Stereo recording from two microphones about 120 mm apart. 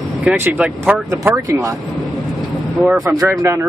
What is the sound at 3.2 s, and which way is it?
Speech, 25° right (ahead or behind).